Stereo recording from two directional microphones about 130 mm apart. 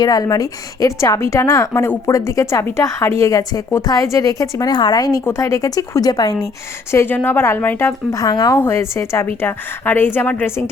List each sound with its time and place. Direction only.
0.0 s a woman's voice: 30° left (ahead or behind)
6.9 s a woman's voice: 20° left (ahead or behind)
8.5 s a woman's voice: 20° left (ahead or behind)